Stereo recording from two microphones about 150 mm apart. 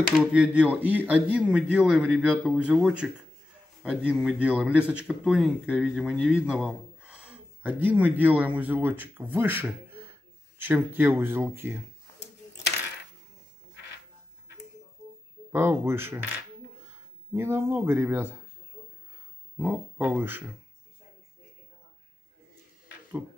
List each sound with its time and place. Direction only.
0.2 s speech: 10° right (ahead or behind)
15.5 s speech: 15° right (ahead or behind)
17.3 s speech: 15° right (ahead or behind)
19.5 s speech: 15° right (ahead or behind)